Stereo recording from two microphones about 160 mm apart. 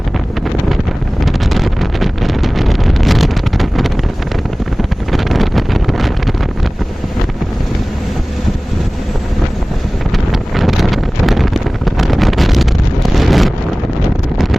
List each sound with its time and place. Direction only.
1.2 s wind noise: centre (ahead or behind)
4.8 s vehicle: centre (ahead or behind)
10.5 s wind noise: centre (ahead or behind)